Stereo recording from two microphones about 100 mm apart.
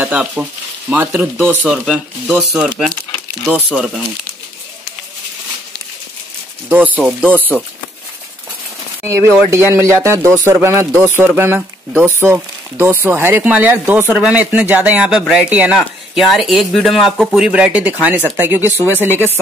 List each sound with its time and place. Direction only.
0.0 s frying: 15° right (ahead or behind)
0.4 s speech: 15° right (ahead or behind)
1.7 s speech: centre (ahead or behind)
6.7 s speech: 15° right (ahead or behind)
9.0 s speech: 25° right (ahead or behind)